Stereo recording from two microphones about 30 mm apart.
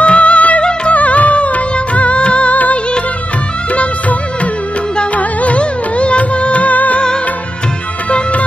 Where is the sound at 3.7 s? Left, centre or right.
Left.